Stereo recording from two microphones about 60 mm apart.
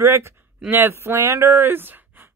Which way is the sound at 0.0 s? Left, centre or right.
Right.